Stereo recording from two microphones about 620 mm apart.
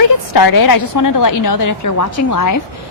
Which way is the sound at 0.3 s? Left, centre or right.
Left.